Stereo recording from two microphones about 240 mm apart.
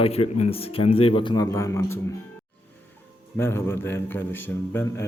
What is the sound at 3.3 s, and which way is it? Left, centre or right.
A man's voice, centre.